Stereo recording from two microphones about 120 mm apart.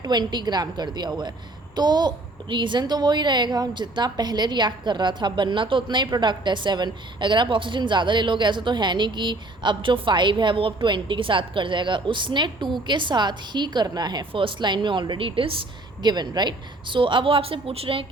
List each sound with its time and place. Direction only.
0.0 s a child's voice: 35° right (ahead or behind)
16.0 s speech: 35° right (ahead or behind)